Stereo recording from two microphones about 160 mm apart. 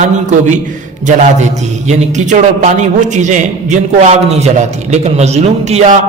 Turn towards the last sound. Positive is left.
turn(degrees=-45)  # may be behind; listen again after turning